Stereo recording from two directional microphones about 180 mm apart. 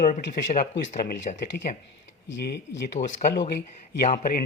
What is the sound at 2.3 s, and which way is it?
Speech, 70° left (ahead or behind).